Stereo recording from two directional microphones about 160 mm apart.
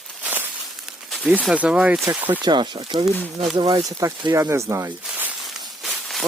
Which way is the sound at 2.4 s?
30° right (ahead or behind).